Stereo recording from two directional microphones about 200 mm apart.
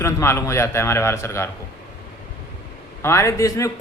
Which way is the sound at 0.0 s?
15° left (ahead or behind).